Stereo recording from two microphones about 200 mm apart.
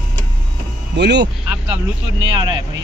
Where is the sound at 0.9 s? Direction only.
60° right (ahead or behind).